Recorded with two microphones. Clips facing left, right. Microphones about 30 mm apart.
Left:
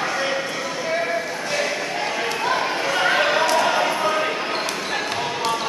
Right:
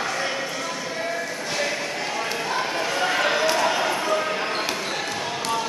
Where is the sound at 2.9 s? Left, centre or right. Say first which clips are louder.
Left 5 dB; left.